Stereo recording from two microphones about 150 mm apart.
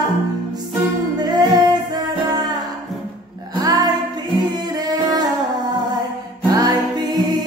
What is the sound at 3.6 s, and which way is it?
Music, 25° right (ahead or behind).